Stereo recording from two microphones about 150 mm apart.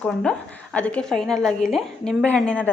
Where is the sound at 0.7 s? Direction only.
10° left (ahead or behind).